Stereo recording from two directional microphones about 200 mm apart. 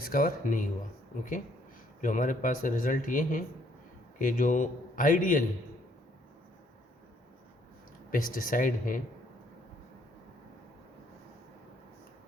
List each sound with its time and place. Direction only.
0.0 s speech: 45° left (ahead or behind)
2.0 s speech: 40° left (ahead or behind)
8.1 s speech: 45° left (ahead or behind)